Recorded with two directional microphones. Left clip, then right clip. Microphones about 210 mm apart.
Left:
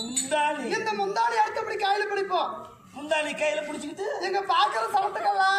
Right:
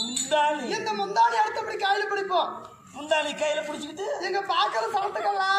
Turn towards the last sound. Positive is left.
turn(degrees=5)  # may be behind; listen again after turning